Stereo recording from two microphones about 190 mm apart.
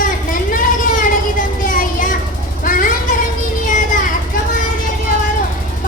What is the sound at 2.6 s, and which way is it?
Vehicle, 45° left (ahead or behind).